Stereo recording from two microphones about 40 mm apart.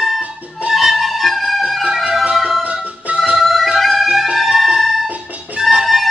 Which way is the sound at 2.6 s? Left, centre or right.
Right.